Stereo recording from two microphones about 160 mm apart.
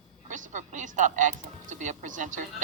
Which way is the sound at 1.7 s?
50° right (ahead or behind).